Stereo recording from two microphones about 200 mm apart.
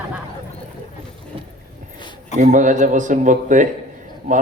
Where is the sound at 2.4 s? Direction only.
40° right (ahead or behind).